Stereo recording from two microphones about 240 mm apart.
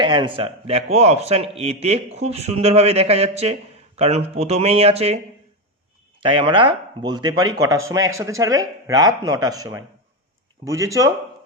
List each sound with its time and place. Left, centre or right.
0.0 s speech: centre